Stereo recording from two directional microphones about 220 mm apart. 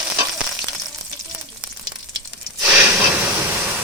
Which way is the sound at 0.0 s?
5° right (ahead or behind).